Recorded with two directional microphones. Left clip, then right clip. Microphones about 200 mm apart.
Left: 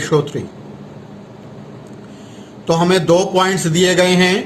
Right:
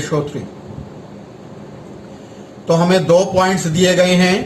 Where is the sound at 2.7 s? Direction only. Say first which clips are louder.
Right 1 dB; 55° left (ahead or behind).